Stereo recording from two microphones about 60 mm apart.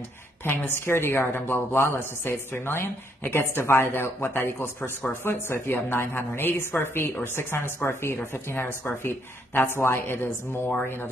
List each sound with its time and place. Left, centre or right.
0.5 s a woman's voice: left